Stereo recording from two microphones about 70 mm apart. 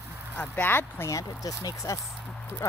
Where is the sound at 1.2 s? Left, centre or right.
Left.